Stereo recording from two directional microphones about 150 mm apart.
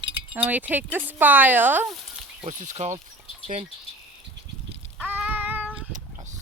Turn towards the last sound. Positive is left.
turn(degrees=-10)  # may be behind; listen again after turning